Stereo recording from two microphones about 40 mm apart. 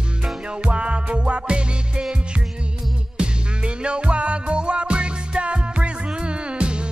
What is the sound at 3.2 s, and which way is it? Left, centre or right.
Music, right.